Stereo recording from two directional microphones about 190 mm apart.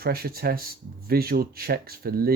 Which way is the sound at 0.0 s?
55° right (ahead or behind).